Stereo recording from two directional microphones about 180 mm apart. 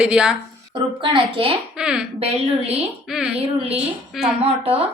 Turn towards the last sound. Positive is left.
turn(degrees=-35)  # may be behind; listen again after turning